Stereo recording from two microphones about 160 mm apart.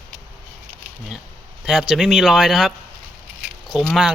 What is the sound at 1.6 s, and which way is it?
Speech, 5° right (ahead or behind).